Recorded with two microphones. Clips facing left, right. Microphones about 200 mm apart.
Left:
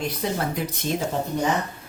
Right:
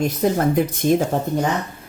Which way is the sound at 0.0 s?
50° right (ahead or behind).